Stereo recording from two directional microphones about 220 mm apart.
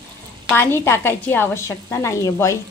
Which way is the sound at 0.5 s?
10° left (ahead or behind).